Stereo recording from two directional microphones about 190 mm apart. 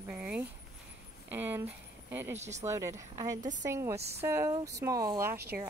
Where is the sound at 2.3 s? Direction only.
35° right (ahead or behind).